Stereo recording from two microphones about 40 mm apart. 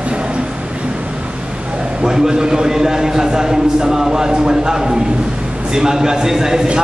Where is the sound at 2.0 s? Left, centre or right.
Centre.